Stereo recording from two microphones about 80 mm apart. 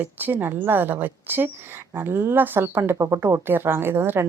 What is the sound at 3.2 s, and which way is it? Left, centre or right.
Speech, right.